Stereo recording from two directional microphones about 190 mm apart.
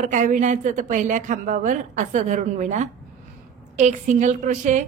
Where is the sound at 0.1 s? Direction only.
40° right (ahead or behind).